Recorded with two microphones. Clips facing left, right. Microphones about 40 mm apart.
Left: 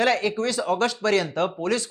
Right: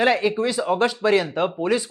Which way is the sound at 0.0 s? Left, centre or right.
Centre.